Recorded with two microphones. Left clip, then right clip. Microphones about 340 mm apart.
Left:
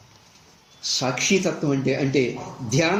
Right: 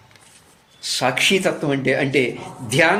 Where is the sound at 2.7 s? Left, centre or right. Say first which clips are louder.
Right 6 dB; right.